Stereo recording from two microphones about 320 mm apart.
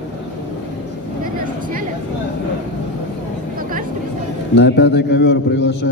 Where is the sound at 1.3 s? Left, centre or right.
Right.